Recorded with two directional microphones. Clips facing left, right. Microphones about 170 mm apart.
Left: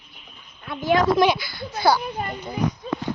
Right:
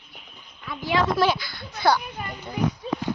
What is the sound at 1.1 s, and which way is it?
Speech, 15° left (ahead or behind).